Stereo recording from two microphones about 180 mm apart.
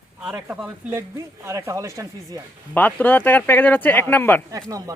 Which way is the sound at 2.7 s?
10° left (ahead or behind).